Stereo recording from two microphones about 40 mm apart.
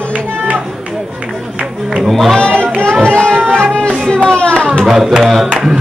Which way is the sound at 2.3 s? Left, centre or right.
Left.